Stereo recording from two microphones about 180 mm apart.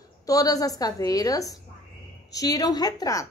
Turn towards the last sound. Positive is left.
turn(degrees=20)  # may be behind; listen again after turning